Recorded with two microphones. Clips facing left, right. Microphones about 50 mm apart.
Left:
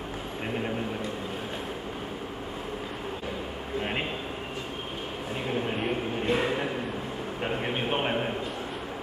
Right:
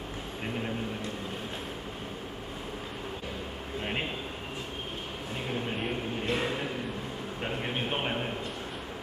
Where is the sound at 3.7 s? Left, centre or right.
Centre.